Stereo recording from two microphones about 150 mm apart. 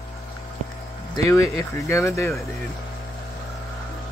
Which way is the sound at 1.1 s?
20° left (ahead or behind).